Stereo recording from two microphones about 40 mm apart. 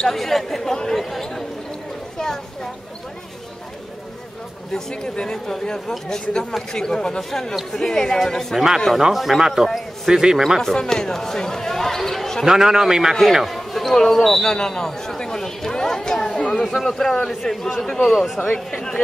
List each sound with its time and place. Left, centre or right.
0.1 s speech: centre
1.1 s basketball bounce: centre
2.1 s speech: centre
4.7 s speech: centre
8.5 s speech: centre
10.6 s speech: centre
12.4 s speech: centre
14.5 s speech: centre
18.1 s speech: centre